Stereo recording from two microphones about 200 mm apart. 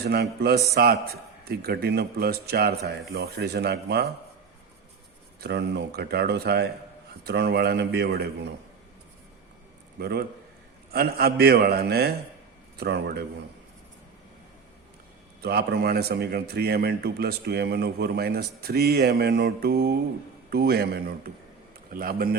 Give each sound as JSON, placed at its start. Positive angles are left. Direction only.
{"t": 0.0, "sound": "a man's voice", "side_deg": -55}
{"t": 5.4, "sound": "speech", "side_deg": -60}
{"t": 10.0, "sound": "a man's voice", "side_deg": -50}
{"t": 15.4, "sound": "a man's voice", "side_deg": -50}